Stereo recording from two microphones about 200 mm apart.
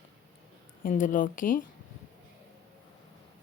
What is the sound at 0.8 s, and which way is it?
Speech, 40° left (ahead or behind).